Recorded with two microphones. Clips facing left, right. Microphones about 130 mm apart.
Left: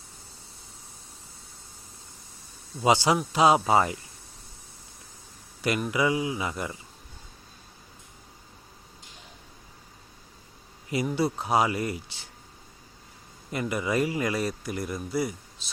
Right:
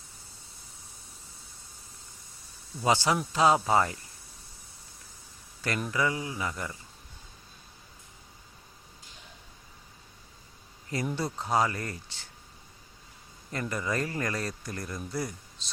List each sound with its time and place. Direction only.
2.8 s speech: 15° left (ahead or behind)
5.9 s speech: 15° left (ahead or behind)
10.9 s speech: 10° left (ahead or behind)
13.5 s speech: 15° left (ahead or behind)